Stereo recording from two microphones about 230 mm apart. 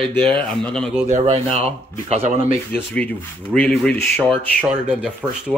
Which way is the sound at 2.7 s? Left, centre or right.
Centre.